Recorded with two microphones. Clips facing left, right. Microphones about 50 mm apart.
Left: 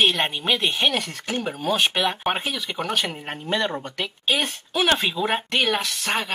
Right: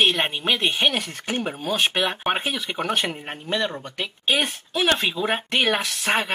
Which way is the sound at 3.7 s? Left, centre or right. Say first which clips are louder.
Left 3 dB; centre.